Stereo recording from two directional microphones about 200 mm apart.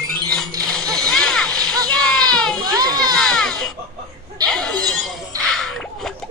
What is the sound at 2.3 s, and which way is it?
Baby cry, 5° left (ahead or behind).